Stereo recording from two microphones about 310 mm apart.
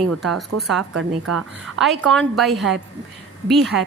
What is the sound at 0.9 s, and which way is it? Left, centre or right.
Speech, right.